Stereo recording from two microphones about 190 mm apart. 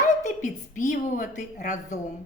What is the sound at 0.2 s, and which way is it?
A woman's voice, 40° left (ahead or behind).